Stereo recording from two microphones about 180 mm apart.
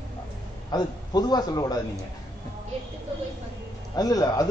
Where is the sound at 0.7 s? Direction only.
20° left (ahead or behind).